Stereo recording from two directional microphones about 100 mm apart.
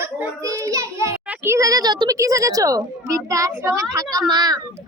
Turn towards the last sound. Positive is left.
turn(degrees=-40)  # may be behind; listen again after turning